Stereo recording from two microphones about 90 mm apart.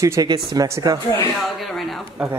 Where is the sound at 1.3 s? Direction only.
Centre (ahead or behind).